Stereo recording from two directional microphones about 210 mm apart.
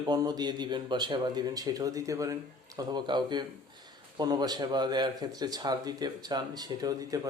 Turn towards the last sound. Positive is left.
turn(degrees=-15)  # may be behind; listen again after turning